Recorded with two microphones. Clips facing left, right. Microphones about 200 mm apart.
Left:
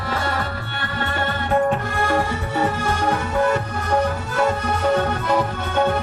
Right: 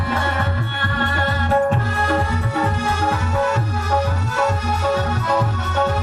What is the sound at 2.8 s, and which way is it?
Music, 55° left (ahead or behind).